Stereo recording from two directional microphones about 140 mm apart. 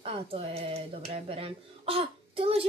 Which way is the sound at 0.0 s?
45° right (ahead or behind).